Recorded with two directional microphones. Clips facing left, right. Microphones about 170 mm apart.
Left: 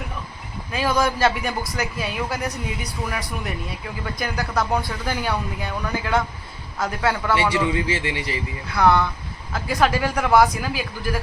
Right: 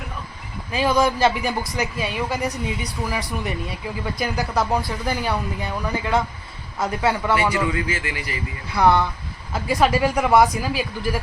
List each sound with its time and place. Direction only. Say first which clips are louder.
0.7 s speech: right 2 dB; centre (ahead or behind)
7.5 s a man's voice: left 1 dB; 25° left (ahead or behind)
8.7 s speech: even; centre (ahead or behind)